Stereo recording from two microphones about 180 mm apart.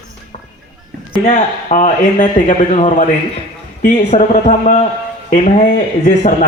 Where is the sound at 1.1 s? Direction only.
40° left (ahead or behind).